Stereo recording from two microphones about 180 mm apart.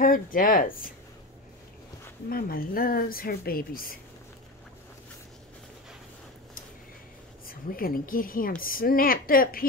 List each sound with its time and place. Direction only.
0.0 s speech: 50° left (ahead or behind)
2.2 s speech: 55° left (ahead or behind)
7.4 s speech: 55° left (ahead or behind)